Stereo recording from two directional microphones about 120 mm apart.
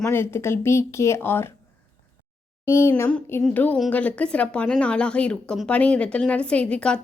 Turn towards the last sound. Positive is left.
turn(degrees=10)  # may be behind; listen again after turning